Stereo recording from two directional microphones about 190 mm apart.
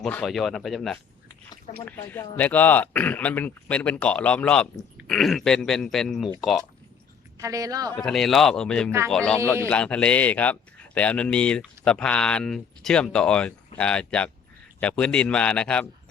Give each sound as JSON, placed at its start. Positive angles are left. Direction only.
{"t": 0.0, "sound": "speech", "side_deg": 5}
{"t": 7.3, "sound": "speech", "side_deg": -15}
{"t": 7.9, "sound": "speech", "side_deg": 0}